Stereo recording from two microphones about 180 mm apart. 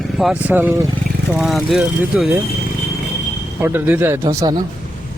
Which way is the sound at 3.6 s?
10° right (ahead or behind).